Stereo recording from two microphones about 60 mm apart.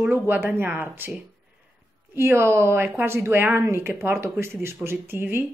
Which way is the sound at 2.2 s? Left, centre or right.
Right.